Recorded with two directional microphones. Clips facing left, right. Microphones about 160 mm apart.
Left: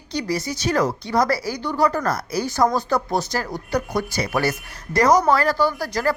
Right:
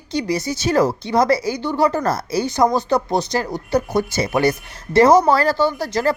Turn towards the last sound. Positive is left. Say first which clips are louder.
# right 3 dB
turn(degrees=-25)  # may be behind; listen again after turning